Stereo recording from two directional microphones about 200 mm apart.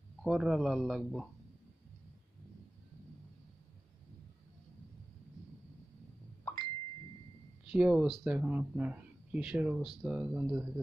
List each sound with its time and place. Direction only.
0.2 s speech: centre (ahead or behind)
6.4 s a sound: 20° left (ahead or behind)
7.7 s speech: 5° right (ahead or behind)